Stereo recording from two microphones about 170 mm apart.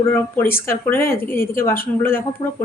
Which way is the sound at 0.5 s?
15° left (ahead or behind).